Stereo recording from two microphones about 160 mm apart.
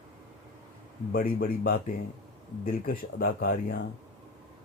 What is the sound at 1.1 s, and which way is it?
Speech, 65° left (ahead or behind).